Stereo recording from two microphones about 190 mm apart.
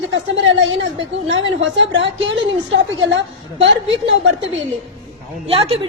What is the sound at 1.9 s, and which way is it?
A woman's voice, 80° right.